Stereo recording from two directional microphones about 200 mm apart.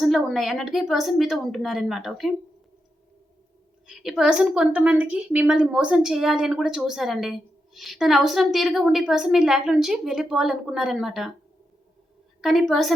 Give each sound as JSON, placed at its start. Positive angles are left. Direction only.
{"t": 0.0, "sound": "a woman's voice", "side_deg": 0}
{"t": 3.8, "sound": "a woman's voice", "side_deg": 0}
{"t": 12.4, "sound": "a woman's voice", "side_deg": 0}